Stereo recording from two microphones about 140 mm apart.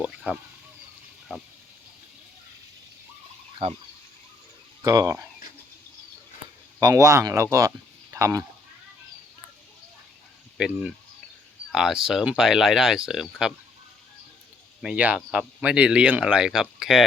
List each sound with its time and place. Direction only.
0.0 s speech: 5° right (ahead or behind)
4.8 s speech: 25° right (ahead or behind)
6.7 s speech: 25° right (ahead or behind)
10.6 s speech: 5° right (ahead or behind)
14.8 s speech: 5° right (ahead or behind)